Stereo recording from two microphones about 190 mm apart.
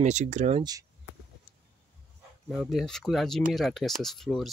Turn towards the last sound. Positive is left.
turn(degrees=0)  # may be behind; listen again after turning